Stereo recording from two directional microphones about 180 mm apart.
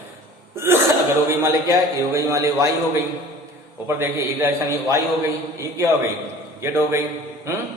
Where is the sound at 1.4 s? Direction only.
15° right (ahead or behind).